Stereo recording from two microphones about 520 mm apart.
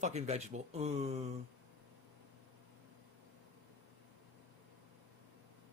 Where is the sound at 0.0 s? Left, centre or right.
Centre.